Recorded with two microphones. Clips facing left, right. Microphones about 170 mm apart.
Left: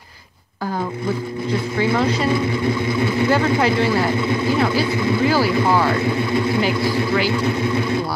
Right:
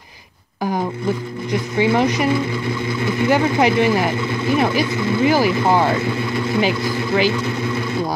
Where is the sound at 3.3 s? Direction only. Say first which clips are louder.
Right 4 dB; 15° right (ahead or behind).